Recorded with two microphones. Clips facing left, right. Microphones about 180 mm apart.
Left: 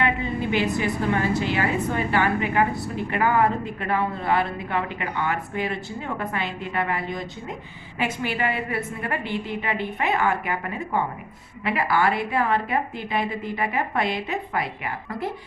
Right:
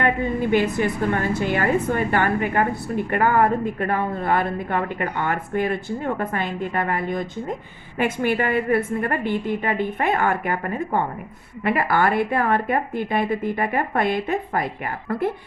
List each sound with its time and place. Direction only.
0.0 s a woman's voice: 50° right (ahead or behind)